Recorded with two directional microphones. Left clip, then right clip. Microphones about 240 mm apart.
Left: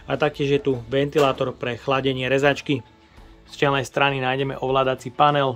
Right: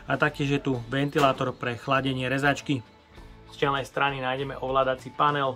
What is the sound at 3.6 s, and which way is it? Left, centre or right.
Speech, left.